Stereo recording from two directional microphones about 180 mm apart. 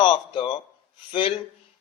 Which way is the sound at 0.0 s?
25° left (ahead or behind).